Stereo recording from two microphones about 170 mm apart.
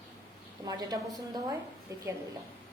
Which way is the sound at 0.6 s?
20° right (ahead or behind).